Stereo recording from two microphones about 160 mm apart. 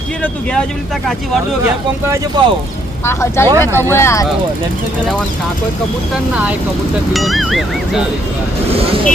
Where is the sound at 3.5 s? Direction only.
20° right (ahead or behind).